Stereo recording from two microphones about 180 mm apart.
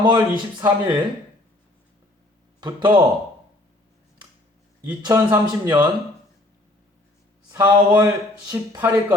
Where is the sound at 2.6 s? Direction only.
25° right (ahead or behind).